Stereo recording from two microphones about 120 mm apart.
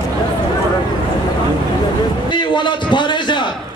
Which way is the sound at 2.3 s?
40° left (ahead or behind).